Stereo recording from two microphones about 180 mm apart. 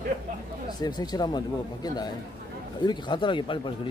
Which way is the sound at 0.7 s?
25° left (ahead or behind).